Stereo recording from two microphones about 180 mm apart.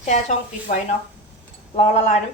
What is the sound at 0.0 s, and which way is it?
A woman's voice, 40° left (ahead or behind).